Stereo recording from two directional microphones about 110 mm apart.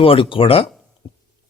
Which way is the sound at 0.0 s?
55° left (ahead or behind).